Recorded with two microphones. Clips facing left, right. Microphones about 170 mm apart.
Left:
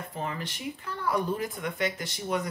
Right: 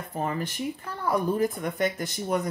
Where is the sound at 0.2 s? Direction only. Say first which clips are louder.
Right 6 dB; 45° right (ahead or behind).